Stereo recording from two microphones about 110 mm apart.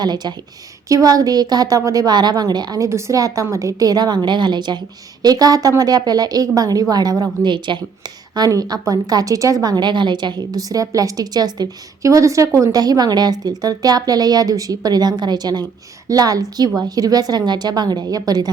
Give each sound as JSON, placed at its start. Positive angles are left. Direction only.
{"t": 0.0, "sound": "a woman's voice", "side_deg": -40}